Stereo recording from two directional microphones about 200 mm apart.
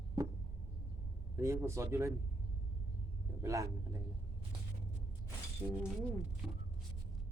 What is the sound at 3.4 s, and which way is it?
Speech, 15° right (ahead or behind).